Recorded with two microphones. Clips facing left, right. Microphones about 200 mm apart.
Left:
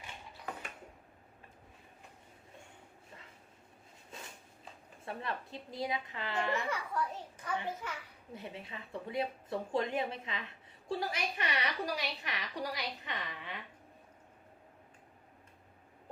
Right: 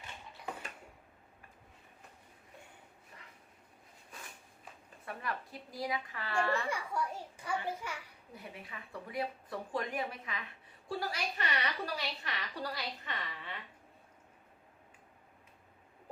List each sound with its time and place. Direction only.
4.1 s a sound: 25° left (ahead or behind)
5.0 s speech: 25° left (ahead or behind)
6.7 s a child's voice: 10° right (ahead or behind)
8.3 s a woman's voice: 25° left (ahead or behind)